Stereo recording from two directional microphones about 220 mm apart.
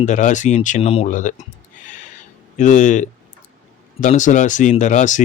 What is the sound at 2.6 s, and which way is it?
Speech, 35° left (ahead or behind).